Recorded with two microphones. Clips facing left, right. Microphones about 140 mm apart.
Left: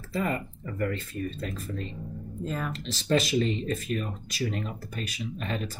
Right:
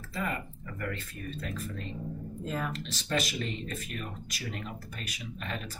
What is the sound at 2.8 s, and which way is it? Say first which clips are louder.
Speech: left 6 dB; 30° left (ahead or behind).